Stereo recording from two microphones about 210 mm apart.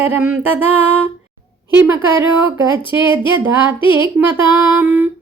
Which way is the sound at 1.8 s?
10° right (ahead or behind).